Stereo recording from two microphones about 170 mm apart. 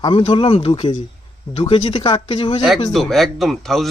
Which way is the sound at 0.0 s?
30° left (ahead or behind).